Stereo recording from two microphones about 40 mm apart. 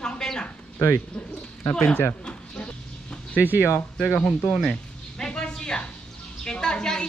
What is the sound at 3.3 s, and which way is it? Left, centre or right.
Speech, right.